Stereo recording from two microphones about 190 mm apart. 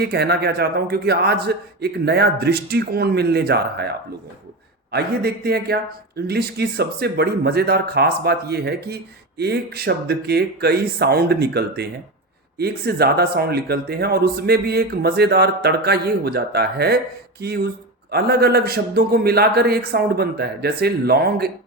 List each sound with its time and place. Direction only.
0.0 s speech: 60° right (ahead or behind)